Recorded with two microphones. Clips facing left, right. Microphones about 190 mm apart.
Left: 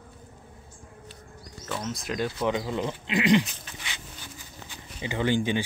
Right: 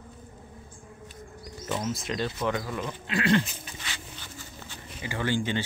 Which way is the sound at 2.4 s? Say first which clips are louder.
Left 3 dB; 20° left (ahead or behind).